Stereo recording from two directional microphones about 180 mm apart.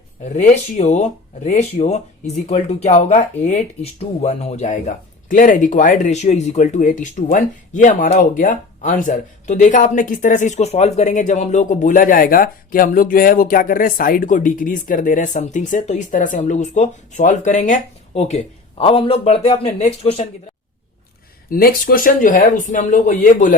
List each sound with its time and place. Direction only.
0.3 s speech: 45° left (ahead or behind)
21.5 s speech: 55° left (ahead or behind)